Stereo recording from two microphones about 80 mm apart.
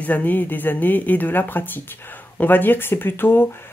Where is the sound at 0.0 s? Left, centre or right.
Centre.